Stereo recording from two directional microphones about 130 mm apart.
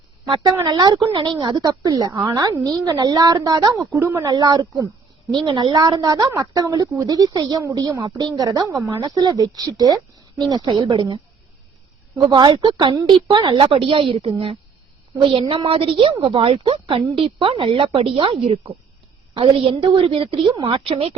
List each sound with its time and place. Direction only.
0.3 s a woman's voice: 40° right (ahead or behind)
12.3 s a woman's voice: 40° right (ahead or behind)
19.3 s a woman's voice: 35° right (ahead or behind)